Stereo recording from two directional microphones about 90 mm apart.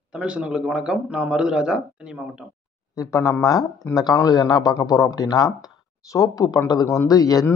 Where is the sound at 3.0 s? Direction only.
35° left (ahead or behind).